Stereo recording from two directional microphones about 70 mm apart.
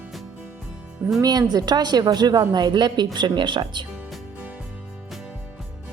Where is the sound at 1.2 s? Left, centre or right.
Right.